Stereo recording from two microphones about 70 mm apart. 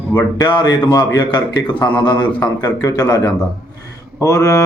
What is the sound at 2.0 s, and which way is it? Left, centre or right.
Speech, left.